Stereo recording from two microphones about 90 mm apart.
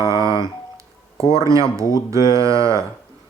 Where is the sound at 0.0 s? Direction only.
35° right (ahead or behind).